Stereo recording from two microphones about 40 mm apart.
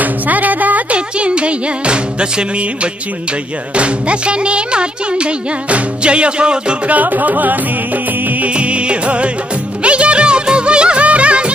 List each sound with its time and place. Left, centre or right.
0.0 s music: right
0.9 s music: right
6.9 s music: right
8.5 s music: right
9.8 s music of bollywood: right